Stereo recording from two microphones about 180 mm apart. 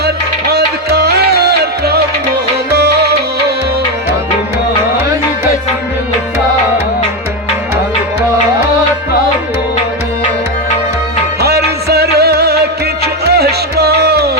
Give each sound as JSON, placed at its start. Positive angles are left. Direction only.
{"t": 0.0, "sound": "music", "side_deg": -60}
{"t": 11.3, "sound": "music", "side_deg": -65}